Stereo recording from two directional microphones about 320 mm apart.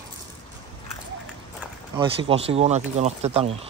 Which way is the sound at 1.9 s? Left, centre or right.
Centre.